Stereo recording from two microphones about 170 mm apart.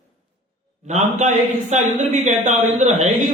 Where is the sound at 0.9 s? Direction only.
45° right (ahead or behind).